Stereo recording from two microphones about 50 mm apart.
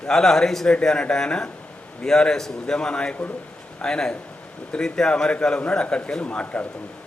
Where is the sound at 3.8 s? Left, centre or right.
Centre; by 6.7 s left.